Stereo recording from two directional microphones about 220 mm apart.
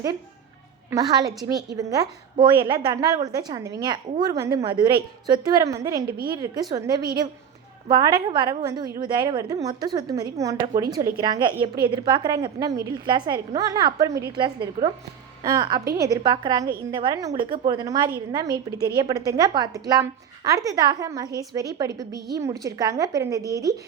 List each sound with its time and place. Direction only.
0.9 s a woman's voice: 15° right (ahead or behind)
6.1 s a woman's voice: 40° right (ahead or behind)
6.4 s a woman's voice: 15° right (ahead or behind)